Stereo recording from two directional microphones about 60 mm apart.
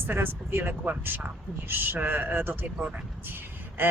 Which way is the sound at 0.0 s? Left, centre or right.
Right.